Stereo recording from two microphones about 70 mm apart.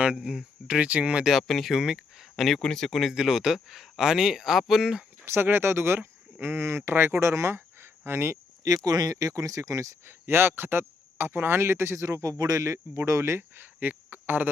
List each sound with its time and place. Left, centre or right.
0.0 s speech: centre
1.3 s speech: centre
5.2 s speech: right
8.6 s speech: right
10.1 s speech: right